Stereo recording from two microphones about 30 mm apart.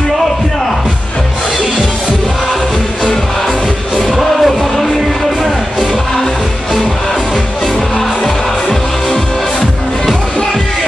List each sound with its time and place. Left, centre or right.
4.0 s music: centre
8.2 s music: left